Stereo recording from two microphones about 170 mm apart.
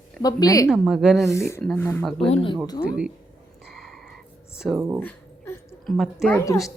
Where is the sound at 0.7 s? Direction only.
5° right (ahead or behind).